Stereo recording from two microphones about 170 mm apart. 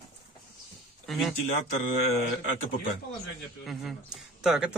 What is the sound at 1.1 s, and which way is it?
Speech, centre (ahead or behind).